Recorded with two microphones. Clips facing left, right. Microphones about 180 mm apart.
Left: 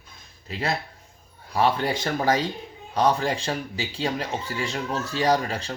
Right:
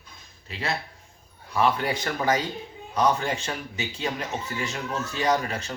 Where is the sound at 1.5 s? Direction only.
30° left (ahead or behind).